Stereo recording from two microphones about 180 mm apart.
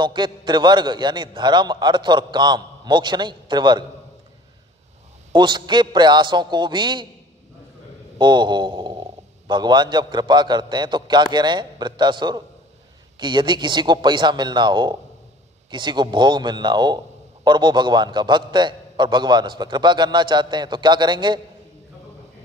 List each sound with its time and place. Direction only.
0.0 s a man's voice: 25° right (ahead or behind)
5.3 s a man's voice: 25° right (ahead or behind)
8.2 s a man's voice: 25° right (ahead or behind)